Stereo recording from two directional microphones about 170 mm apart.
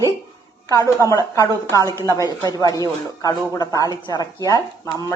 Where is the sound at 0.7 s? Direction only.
20° left (ahead or behind).